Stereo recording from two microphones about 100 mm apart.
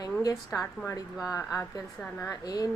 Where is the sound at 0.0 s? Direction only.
40° left (ahead or behind).